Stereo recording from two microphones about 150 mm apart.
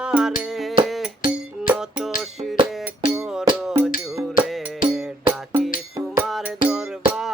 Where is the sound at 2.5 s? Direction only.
35° right (ahead or behind).